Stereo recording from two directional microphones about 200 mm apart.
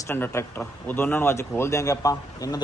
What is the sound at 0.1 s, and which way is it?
Speech, 10° left (ahead or behind).